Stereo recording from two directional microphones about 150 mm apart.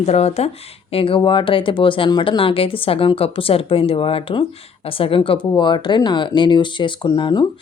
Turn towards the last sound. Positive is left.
turn(degrees=30)  # may be behind; listen again after turning